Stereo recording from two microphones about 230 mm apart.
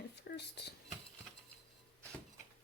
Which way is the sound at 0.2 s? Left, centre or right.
Left.